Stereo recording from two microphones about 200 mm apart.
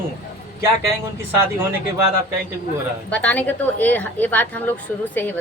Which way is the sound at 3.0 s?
5° left (ahead or behind).